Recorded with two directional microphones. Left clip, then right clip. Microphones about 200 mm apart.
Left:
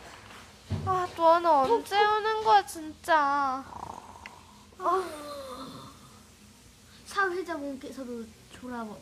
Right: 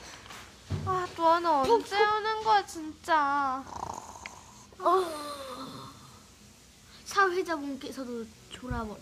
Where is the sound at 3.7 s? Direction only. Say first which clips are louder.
Right 3 dB; 45° right (ahead or behind).